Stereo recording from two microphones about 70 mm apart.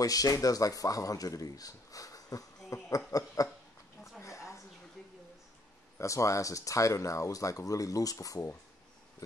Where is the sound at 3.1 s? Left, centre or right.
Left.